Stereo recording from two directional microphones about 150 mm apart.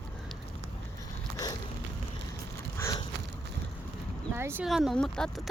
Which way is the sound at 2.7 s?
20° left (ahead or behind).